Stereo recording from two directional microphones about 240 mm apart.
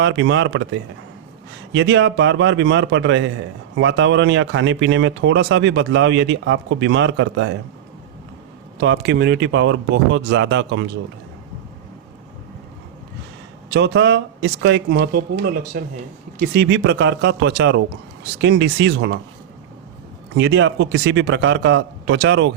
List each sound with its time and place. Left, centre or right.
0.0 s speech: right
8.8 s speech: right
13.7 s speech: right
20.3 s speech: right